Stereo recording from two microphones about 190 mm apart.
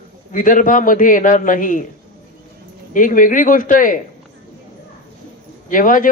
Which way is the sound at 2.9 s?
45° left (ahead or behind).